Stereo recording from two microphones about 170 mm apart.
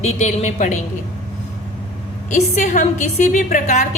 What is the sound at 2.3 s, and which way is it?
A woman's voice, 45° left (ahead or behind).